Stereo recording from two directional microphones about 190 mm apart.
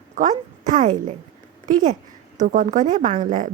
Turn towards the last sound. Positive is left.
turn(degrees=-45)  # may be behind; listen again after turning